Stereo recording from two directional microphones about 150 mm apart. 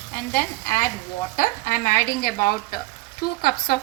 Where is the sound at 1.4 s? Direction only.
65° left (ahead or behind).